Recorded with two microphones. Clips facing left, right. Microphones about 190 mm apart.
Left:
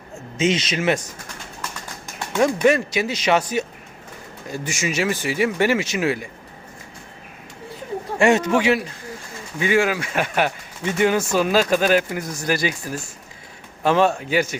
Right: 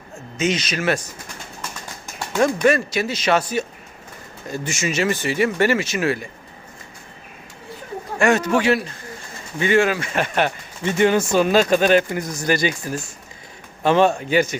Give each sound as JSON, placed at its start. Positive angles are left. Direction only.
{"t": 0.3, "sound": "speech", "side_deg": 25}
{"t": 2.4, "sound": "speech", "side_deg": 15}
{"t": 8.2, "sound": "speech", "side_deg": 25}